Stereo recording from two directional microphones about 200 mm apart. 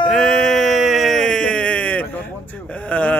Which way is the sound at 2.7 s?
5° left (ahead or behind).